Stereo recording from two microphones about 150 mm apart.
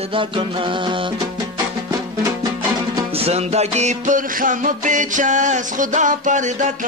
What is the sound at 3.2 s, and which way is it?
Music, 45° right (ahead or behind).